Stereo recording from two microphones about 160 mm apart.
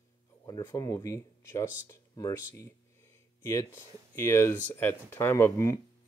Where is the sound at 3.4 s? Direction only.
15° left (ahead or behind).